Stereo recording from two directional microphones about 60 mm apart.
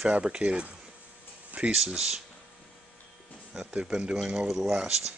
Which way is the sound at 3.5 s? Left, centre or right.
Centre.